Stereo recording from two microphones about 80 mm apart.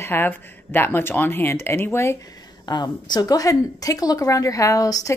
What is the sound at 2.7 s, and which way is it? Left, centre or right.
Speech, left.